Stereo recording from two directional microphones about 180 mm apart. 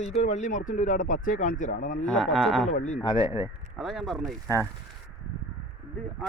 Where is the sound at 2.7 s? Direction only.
40° left (ahead or behind).